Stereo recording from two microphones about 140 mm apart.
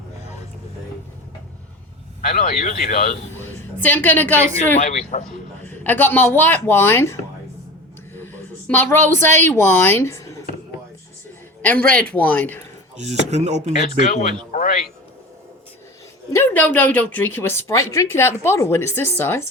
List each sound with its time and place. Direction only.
2.2 s speech: 85° left
3.3 s a sound: 15° left (ahead or behind)
4.8 s speech: 55° left (ahead or behind)
5.6 s speech: 15° left (ahead or behind)
8.6 s a woman's voice: 15° left (ahead or behind)
11.6 s speech: 10° left (ahead or behind)
13.0 s speech: 50° right (ahead or behind)
14.0 s speech: 60° left (ahead or behind)
16.3 s speech: 15° left (ahead or behind)